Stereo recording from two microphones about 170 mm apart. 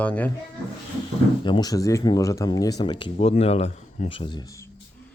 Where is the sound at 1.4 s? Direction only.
25° left (ahead or behind).